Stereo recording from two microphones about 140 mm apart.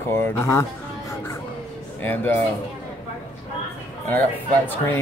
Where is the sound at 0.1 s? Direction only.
20° left (ahead or behind).